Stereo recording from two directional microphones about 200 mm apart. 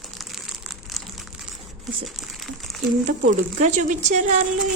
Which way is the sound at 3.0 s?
40° right (ahead or behind).